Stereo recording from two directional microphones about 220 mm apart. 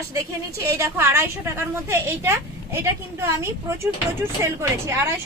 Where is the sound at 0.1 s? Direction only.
15° right (ahead or behind).